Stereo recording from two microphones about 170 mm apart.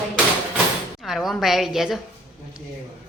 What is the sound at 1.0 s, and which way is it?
A woman's voice, centre (ahead or behind).